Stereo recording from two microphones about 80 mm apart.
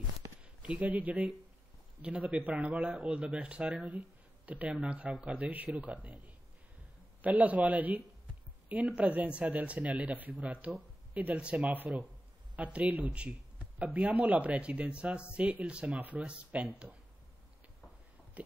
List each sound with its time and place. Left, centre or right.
0.4 s a man's voice: centre